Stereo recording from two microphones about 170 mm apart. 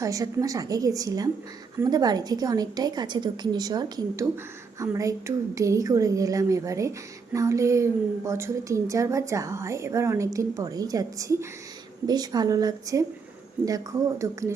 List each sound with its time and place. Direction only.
0.0 s a woman's voice: 20° right (ahead or behind)